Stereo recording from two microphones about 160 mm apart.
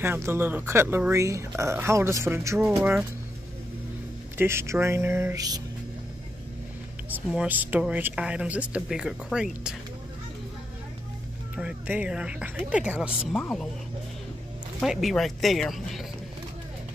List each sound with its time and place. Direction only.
0.0 s speech: 15° right (ahead or behind)
4.4 s speech: 15° right (ahead or behind)
7.1 s speech: 10° right (ahead or behind)
11.5 s speech: 10° right (ahead or behind)
13.3 s speech: 5° left (ahead or behind)
14.8 s speech: centre (ahead or behind)